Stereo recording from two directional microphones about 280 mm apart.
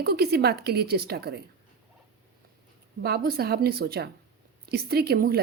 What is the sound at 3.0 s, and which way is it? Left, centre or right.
A woman's voice, right.